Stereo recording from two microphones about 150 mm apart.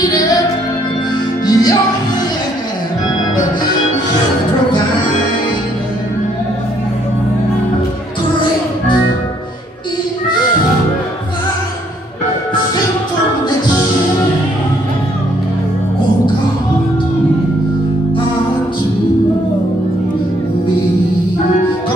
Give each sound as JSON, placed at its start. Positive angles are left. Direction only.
{"t": 1.4, "sound": "music", "side_deg": 25}